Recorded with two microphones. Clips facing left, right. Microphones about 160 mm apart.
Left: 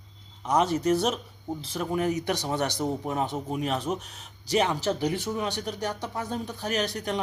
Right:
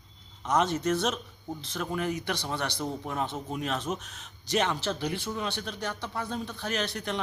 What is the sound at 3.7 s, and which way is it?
Speech, 35° left (ahead or behind).